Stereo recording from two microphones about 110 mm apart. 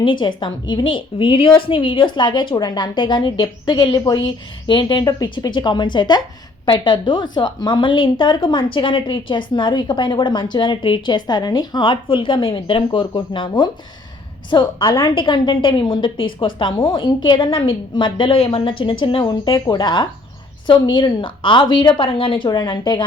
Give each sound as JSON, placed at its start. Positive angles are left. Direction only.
{"t": 0.0, "sound": "a woman's voice", "side_deg": 45}
{"t": 14.5, "sound": "a woman's voice", "side_deg": 45}
{"t": 22.4, "sound": "a woman's voice", "side_deg": 45}